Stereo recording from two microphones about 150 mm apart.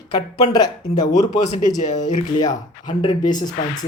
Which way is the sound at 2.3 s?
30° left (ahead or behind).